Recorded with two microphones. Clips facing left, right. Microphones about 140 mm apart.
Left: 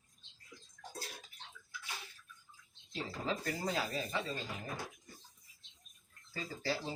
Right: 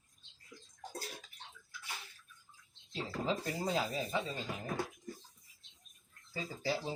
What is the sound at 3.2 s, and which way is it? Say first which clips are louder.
Speech: right 2 dB; 20° right (ahead or behind).